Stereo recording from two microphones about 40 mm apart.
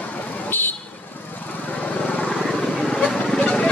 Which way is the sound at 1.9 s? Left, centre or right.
Left.